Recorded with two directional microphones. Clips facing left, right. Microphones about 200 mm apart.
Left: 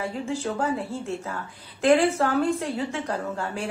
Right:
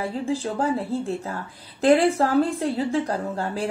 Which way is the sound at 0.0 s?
35° right (ahead or behind).